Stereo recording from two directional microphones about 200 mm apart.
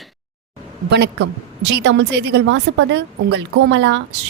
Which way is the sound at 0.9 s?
55° right (ahead or behind).